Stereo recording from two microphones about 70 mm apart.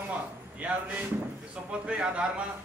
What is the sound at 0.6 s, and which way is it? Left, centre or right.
A man's voice, right.